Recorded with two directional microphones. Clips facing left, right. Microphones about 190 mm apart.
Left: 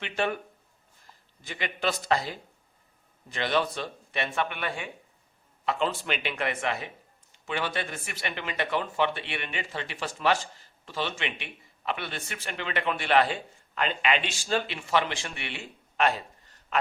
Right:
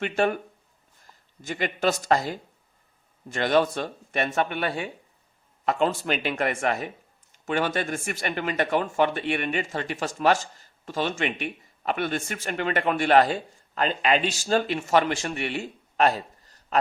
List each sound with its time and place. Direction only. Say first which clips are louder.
0.0 s speech: right 5 dB; 45° right (ahead or behind)
1.4 s speech: right 6 dB; 45° right (ahead or behind)